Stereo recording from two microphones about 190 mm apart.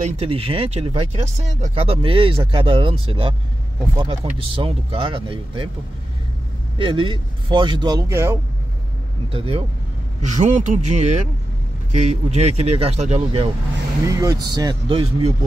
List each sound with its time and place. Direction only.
0.0 s speech: 30° right (ahead or behind)
6.8 s speech: 25° right (ahead or behind)
9.3 s speech: 30° right (ahead or behind)
10.3 s speech: 40° right (ahead or behind)
14.0 s speech: 20° right (ahead or behind)